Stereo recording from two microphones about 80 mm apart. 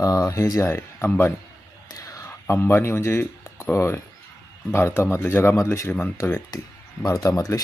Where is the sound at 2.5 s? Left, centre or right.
Left.